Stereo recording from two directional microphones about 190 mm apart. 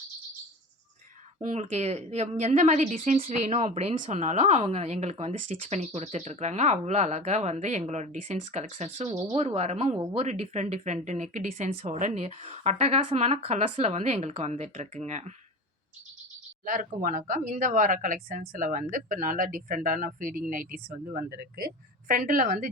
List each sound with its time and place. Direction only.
1.4 s a woman's voice: 40° right (ahead or behind)
10.2 s a woman's voice: 35° right (ahead or behind)
16.6 s a woman's voice: 45° right (ahead or behind)